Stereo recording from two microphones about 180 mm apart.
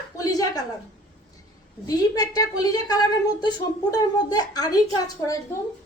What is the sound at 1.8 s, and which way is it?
A woman's voice, 20° left (ahead or behind).